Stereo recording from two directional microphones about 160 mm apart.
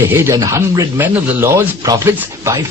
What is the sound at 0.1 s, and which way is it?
Speech, 20° right (ahead or behind).